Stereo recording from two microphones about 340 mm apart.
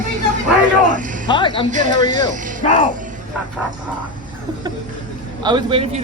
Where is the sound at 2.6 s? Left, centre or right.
Left.